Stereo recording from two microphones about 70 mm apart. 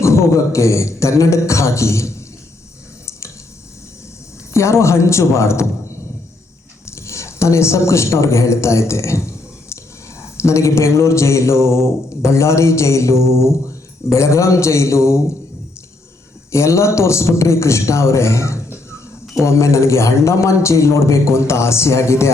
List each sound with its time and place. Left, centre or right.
0.0 s a sound: left
0.5 s a man's voice: left
4.5 s a man's voice: left
10.4 s a sound: left
14.1 s a man's voice: left
16.5 s a man's voice: left